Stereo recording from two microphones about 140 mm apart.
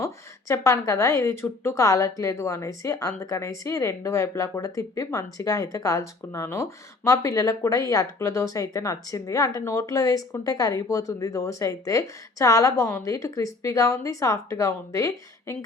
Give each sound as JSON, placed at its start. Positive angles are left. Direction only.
{"t": 0.0, "sound": "speech", "side_deg": 20}